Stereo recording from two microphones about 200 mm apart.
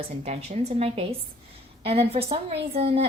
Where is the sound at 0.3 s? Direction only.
30° right (ahead or behind).